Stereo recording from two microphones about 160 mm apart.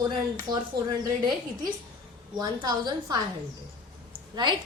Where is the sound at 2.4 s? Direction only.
25° right (ahead or behind).